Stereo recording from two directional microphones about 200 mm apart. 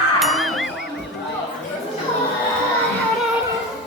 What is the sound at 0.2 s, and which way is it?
Music, centre (ahead or behind).